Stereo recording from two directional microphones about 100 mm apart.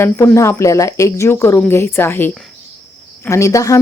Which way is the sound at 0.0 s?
30° left (ahead or behind).